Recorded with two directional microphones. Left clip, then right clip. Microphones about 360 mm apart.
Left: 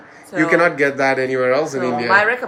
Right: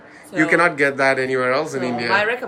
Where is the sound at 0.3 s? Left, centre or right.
Centre.